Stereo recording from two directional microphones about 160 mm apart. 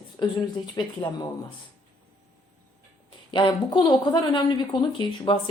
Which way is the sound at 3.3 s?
30° left (ahead or behind).